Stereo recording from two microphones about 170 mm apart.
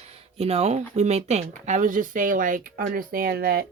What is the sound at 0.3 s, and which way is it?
Speech, 35° right (ahead or behind).